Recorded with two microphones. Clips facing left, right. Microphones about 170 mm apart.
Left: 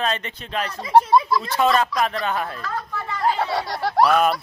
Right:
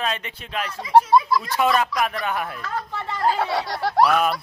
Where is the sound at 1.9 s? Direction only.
Centre (ahead or behind).